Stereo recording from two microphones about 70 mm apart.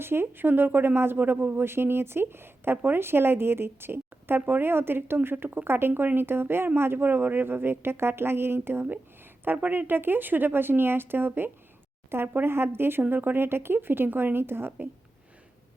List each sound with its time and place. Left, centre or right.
0.0 s speech: right